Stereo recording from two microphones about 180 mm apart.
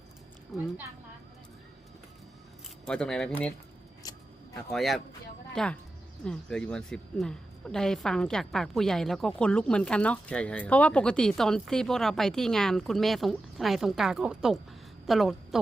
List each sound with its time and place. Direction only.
0.5 s a woman's voice: centre (ahead or behind)
2.8 s a woman's voice: 5° left (ahead or behind)
4.0 s a sound: 20° left (ahead or behind)
4.7 s a woman's voice: centre (ahead or behind)